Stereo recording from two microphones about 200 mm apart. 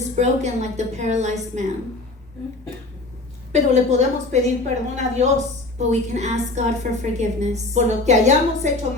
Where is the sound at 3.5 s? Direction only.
35° right (ahead or behind).